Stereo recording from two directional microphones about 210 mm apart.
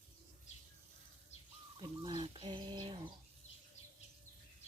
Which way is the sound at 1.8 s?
20° right (ahead or behind).